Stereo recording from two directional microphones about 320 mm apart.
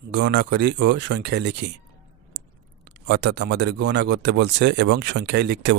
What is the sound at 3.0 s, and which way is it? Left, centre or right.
Speech, right.